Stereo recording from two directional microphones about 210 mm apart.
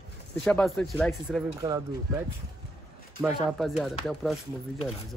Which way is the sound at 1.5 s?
15° right (ahead or behind).